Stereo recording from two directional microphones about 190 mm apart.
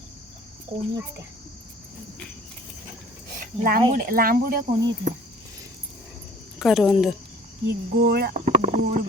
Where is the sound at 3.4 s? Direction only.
50° right (ahead or behind).